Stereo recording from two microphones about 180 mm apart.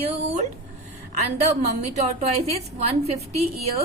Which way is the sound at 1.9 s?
35° right (ahead or behind).